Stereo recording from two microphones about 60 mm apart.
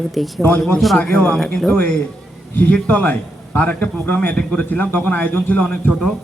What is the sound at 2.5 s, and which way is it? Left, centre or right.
A man's voice, left.